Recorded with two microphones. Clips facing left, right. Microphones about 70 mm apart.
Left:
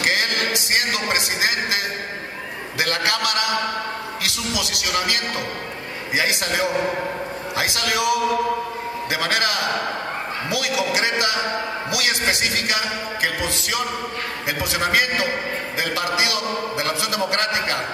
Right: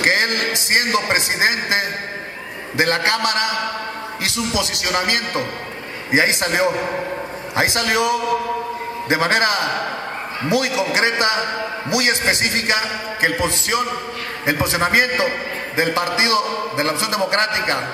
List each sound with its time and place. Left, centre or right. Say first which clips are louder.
0.0 s a man's voice: right 3 dB; right